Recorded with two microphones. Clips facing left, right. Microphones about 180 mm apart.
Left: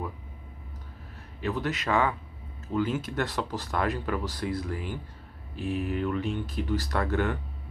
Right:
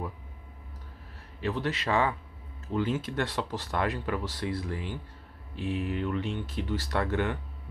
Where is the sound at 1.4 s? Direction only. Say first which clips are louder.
Left 1 dB; 30° right (ahead or behind).